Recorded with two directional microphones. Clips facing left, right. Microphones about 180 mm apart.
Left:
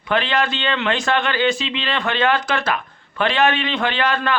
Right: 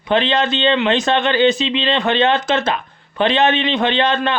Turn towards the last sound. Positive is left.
turn(degrees=-20)  # may be behind; listen again after turning